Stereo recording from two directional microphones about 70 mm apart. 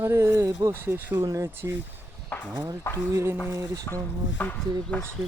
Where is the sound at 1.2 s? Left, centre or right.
Right.